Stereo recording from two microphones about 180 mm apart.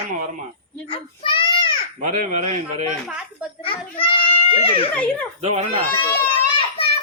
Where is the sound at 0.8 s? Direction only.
30° left (ahead or behind).